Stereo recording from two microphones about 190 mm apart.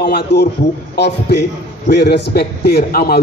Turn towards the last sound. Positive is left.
turn(degrees=55)  # may be behind; listen again after turning